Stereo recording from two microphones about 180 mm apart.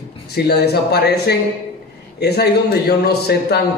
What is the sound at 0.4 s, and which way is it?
A man's voice, 65° left (ahead or behind).